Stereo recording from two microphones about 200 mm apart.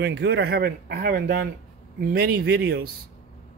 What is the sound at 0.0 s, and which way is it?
Speech, 55° right (ahead or behind).